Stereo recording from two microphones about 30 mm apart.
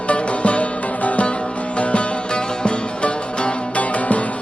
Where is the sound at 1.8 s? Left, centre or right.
Left.